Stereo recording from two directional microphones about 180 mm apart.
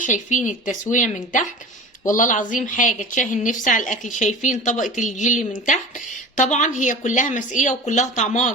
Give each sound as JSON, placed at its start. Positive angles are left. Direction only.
{"t": 0.0, "sound": "a woman's voice", "side_deg": 45}